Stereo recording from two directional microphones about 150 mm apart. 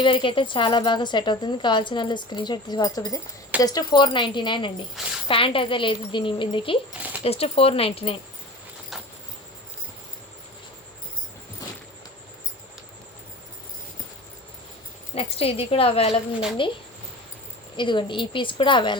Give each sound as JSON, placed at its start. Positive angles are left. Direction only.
{"t": 0.0, "sound": "speech", "side_deg": 35}
{"t": 5.0, "sound": "a woman's voice", "side_deg": 0}
{"t": 5.3, "sound": "speech", "side_deg": 35}
{"t": 15.1, "sound": "speech", "side_deg": 40}
{"t": 17.7, "sound": "speech", "side_deg": 30}